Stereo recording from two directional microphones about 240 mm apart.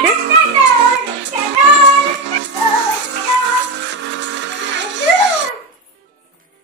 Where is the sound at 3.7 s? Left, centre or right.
Right.